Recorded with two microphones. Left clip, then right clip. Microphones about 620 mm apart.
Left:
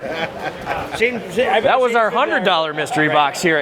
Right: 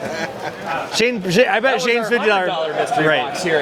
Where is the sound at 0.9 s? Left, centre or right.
Right.